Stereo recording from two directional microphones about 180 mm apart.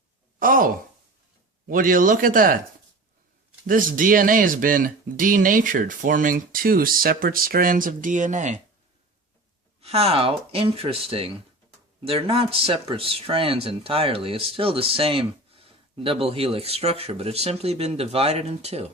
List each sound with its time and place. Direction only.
0.3 s speech: 50° right (ahead or behind)
3.7 s speech: 50° right (ahead or behind)
9.8 s speech: 35° right (ahead or behind)